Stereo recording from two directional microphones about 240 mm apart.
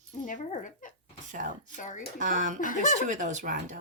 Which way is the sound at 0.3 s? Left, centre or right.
Left.